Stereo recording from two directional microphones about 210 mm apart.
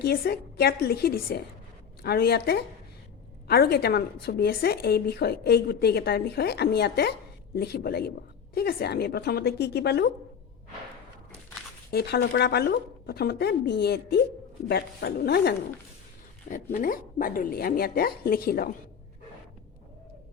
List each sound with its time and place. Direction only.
0.0 s a woman's voice: 50° left (ahead or behind)
11.9 s a woman's voice: 50° left (ahead or behind)
16.7 s a woman's voice: 40° left (ahead or behind)